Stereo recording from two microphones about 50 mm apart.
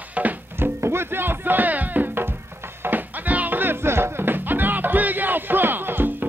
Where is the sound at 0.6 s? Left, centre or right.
Right.